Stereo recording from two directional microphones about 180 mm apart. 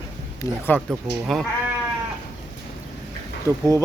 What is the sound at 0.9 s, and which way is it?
Speech, centre (ahead or behind).